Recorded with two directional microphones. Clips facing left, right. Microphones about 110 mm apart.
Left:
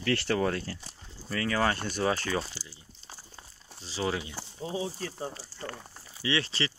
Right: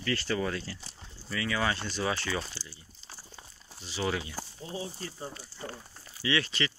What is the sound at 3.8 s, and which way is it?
Speech, 30° left (ahead or behind).